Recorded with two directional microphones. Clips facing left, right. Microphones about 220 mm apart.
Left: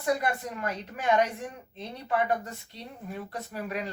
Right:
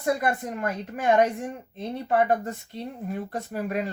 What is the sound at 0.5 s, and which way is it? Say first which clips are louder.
Speech: right 4 dB; 50° right (ahead or behind).